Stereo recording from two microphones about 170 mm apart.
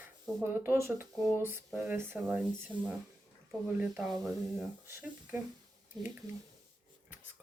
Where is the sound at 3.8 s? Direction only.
5° right (ahead or behind).